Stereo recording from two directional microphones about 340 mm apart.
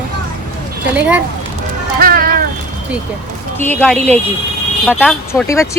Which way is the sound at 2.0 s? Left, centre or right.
Right.